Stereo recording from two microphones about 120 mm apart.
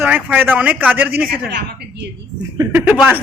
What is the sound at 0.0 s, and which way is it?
Speech, 10° right (ahead or behind).